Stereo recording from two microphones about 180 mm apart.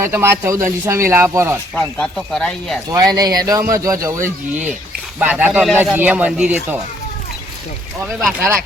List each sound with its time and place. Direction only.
0.0 s speech: 15° right (ahead or behind)
1.7 s speech: 5° left (ahead or behind)
2.9 s speech: 20° right (ahead or behind)
8.0 s speech: centre (ahead or behind)